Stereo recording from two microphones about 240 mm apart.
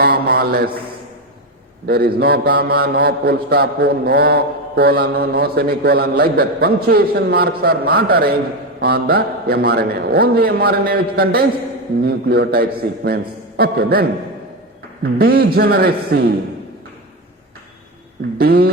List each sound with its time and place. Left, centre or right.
0.0 s speech: right
1.9 s mantra: right
18.3 s mantra: right